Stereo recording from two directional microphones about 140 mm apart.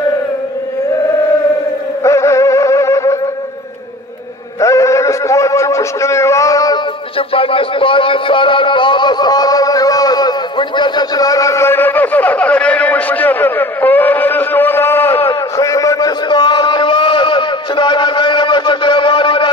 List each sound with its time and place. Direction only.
2.0 s music: 20° left (ahead or behind)
4.6 s music: 25° left (ahead or behind)
7.2 s a sound: 40° left (ahead or behind)